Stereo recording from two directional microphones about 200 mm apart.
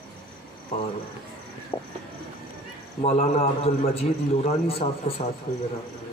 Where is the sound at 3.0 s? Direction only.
35° left (ahead or behind).